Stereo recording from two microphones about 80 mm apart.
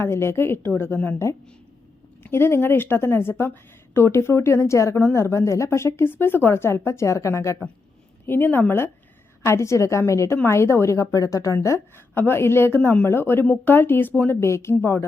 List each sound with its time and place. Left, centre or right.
0.0 s a woman's voice: left
2.2 s a woman's voice: left
8.3 s a woman's voice: left
12.1 s a woman's voice: left
14.4 s a woman's voice: left